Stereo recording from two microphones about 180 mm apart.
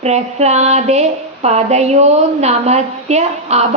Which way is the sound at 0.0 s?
35° right (ahead or behind).